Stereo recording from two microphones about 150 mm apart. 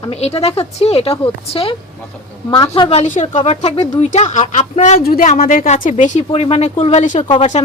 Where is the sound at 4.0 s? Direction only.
50° left (ahead or behind).